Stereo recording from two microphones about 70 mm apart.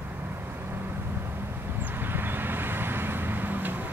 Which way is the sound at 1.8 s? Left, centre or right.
Right.